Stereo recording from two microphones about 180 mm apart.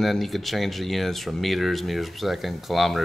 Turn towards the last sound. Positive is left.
turn(degrees=0)  # may be behind; listen again after turning